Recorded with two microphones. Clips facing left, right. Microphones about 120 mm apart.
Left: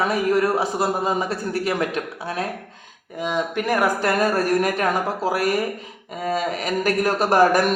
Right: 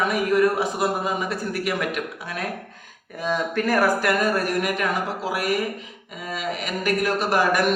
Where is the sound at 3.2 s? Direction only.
15° left (ahead or behind).